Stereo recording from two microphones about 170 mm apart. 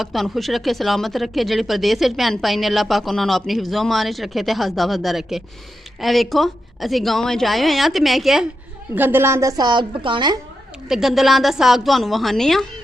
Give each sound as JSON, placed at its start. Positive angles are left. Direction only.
{"t": 0.0, "sound": "speech", "side_deg": 0}
{"t": 9.0, "sound": "a woman's voice", "side_deg": -10}
{"t": 10.8, "sound": "speech", "side_deg": 0}